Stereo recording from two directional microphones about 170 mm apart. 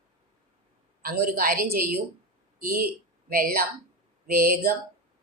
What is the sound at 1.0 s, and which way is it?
A woman's voice, 55° right (ahead or behind).